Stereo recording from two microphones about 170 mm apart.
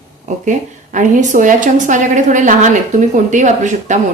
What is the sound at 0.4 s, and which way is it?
A woman's voice, 50° right (ahead or behind).